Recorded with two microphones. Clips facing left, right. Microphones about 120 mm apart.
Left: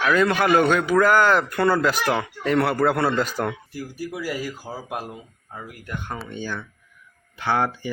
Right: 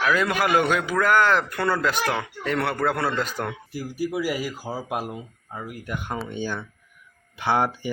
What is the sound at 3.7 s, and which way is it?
Speech, 10° right (ahead or behind).